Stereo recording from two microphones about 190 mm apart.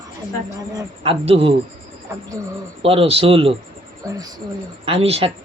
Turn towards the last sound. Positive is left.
turn(degrees=-30)  # may be behind; listen again after turning